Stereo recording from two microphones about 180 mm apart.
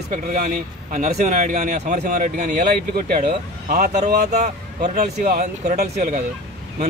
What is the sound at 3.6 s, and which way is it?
Speech, 55° right (ahead or behind).